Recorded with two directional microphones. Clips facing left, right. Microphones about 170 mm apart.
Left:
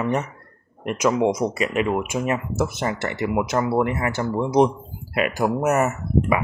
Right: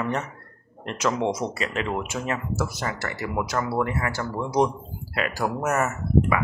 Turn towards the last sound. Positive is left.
turn(degrees=20)  # may be behind; listen again after turning